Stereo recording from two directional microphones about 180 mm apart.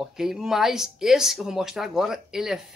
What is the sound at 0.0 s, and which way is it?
Speech, centre (ahead or behind).